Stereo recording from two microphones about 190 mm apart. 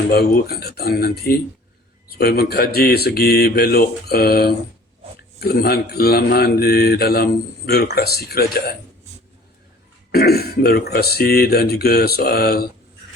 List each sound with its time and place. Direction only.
0.1 s mantra: 55° left (ahead or behind)
10.1 s mantra: 55° left (ahead or behind)